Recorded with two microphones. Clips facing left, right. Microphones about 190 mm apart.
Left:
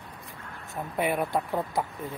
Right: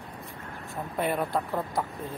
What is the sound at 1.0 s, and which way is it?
Speech, 10° left (ahead or behind).